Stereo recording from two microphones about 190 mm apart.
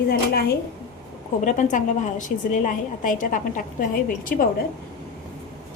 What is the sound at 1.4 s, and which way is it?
A woman's voice, 40° left (ahead or behind).